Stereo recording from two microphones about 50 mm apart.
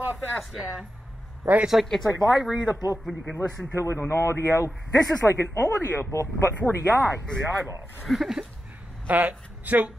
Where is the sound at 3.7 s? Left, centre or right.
Left.